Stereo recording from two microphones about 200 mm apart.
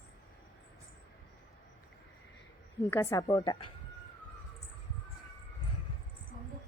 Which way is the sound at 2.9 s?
15° left (ahead or behind).